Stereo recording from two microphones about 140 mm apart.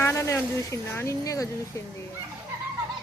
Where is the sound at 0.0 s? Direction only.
20° left (ahead or behind).